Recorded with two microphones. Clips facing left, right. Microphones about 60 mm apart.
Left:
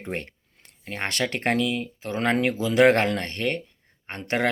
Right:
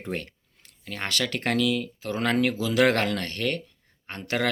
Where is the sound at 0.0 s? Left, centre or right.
Left.